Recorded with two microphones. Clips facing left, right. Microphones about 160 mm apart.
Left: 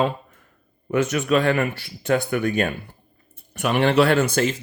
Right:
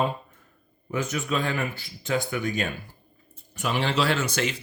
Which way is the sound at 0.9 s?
75° left (ahead or behind).